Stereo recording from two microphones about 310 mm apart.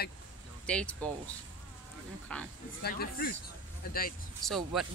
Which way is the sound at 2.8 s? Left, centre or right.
Left.